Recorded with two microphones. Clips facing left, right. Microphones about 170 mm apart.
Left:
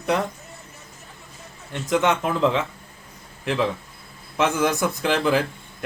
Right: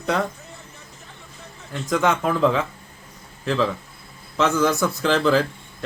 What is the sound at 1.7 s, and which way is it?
Speech, 25° left (ahead or behind).